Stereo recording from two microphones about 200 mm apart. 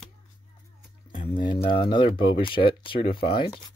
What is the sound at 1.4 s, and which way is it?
Speech, 25° left (ahead or behind).